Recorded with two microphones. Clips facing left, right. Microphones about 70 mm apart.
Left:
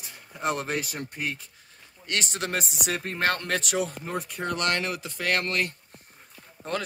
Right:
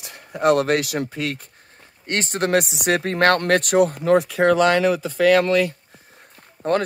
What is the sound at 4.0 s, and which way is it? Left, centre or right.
Speech, right.